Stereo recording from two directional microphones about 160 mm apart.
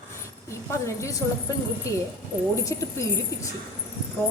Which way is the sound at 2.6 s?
20° left (ahead or behind).